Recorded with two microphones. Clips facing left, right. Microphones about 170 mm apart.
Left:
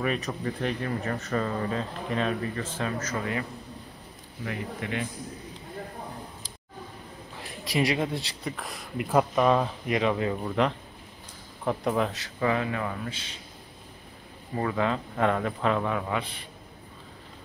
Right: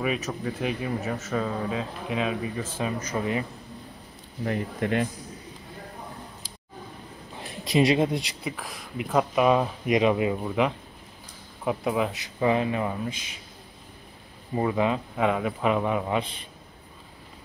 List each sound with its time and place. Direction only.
0.0 s speech: 5° right (ahead or behind)
4.5 s speech: 45° right (ahead or behind)
7.6 s speech: 20° right (ahead or behind)
8.5 s speech: centre (ahead or behind)
14.5 s speech: 15° right (ahead or behind)